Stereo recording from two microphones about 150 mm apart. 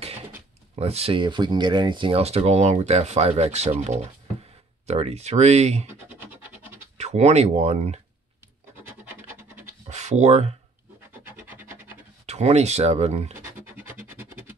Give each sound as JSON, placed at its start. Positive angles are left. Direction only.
{"t": 0.7, "sound": "speech", "side_deg": -45}
{"t": 6.0, "sound": "scratch", "side_deg": -10}
{"t": 7.0, "sound": "speech", "side_deg": -45}
{"t": 8.7, "sound": "scratch", "side_deg": -15}
{"t": 9.8, "sound": "a sound", "side_deg": -50}
{"t": 11.2, "sound": "rub", "side_deg": -10}
{"t": 12.3, "sound": "speech", "side_deg": -45}
{"t": 13.7, "sound": "music", "side_deg": -10}